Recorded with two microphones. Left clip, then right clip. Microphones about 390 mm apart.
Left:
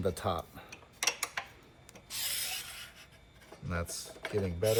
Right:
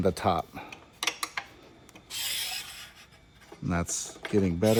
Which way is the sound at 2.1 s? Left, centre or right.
Centre.